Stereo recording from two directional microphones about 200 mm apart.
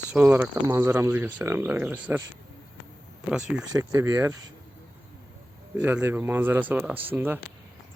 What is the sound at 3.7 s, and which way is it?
Speech, 15° right (ahead or behind).